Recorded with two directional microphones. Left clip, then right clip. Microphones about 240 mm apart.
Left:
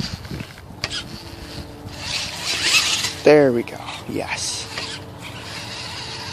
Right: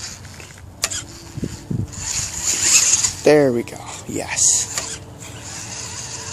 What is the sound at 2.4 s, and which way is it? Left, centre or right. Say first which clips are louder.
Zipper: even; centre.